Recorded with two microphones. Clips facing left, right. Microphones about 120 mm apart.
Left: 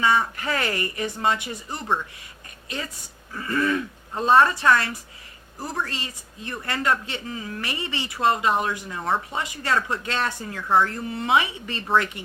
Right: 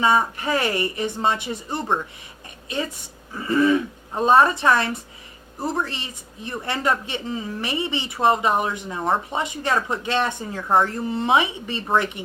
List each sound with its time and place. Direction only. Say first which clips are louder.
0.0 s a woman's voice: right 2 dB; 20° right (ahead or behind)